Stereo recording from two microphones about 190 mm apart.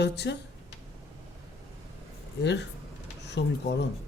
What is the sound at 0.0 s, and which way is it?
Speech, 65° left (ahead or behind).